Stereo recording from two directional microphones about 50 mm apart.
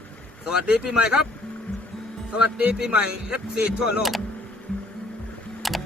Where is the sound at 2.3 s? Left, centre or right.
Right.